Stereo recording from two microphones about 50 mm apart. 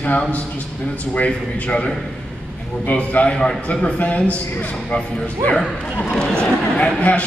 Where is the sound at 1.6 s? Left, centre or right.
Left.